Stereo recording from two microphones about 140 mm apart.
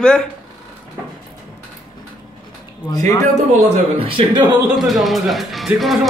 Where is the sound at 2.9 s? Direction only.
25° left (ahead or behind).